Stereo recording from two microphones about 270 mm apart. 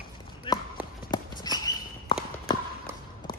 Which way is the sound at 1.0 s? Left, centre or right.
Centre.